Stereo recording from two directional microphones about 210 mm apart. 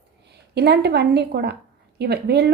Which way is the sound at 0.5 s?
50° right (ahead or behind).